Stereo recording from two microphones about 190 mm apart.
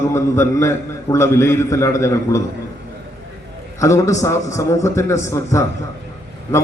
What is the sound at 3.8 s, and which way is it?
A man's voice, 15° left (ahead or behind).